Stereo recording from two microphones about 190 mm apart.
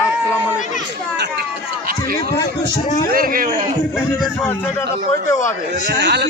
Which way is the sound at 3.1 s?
50° right (ahead or behind).